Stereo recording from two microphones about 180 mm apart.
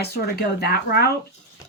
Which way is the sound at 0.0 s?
60° left (ahead or behind).